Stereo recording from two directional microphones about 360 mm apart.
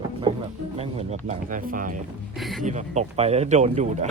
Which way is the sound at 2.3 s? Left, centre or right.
Centre.